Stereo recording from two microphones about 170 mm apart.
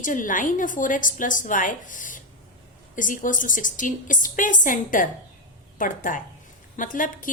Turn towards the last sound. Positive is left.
turn(degrees=50)  # may be behind; listen again after turning